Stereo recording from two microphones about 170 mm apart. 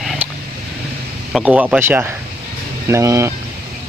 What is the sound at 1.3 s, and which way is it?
Speech, 10° right (ahead or behind).